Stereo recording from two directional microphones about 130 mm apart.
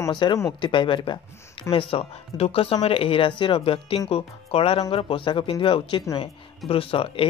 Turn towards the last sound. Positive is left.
turn(degrees=45)  # may be behind; listen again after turning